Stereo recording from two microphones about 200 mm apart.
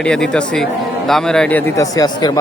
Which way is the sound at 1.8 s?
20° left (ahead or behind).